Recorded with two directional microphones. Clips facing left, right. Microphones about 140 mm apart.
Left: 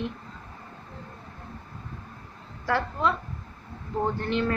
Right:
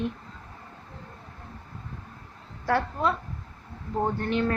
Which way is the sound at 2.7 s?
45° right (ahead or behind).